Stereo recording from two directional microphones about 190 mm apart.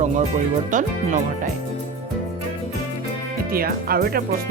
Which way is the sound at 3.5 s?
50° right (ahead or behind).